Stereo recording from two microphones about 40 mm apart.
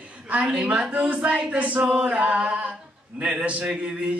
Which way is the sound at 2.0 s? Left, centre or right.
Right.